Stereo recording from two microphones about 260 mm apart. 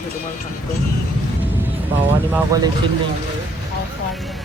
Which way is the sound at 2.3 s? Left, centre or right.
Centre.